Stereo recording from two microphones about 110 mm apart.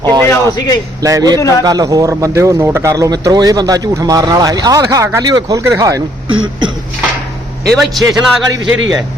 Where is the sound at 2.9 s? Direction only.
30° right (ahead or behind).